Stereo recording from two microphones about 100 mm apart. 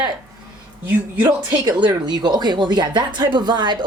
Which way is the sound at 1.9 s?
45° right (ahead or behind).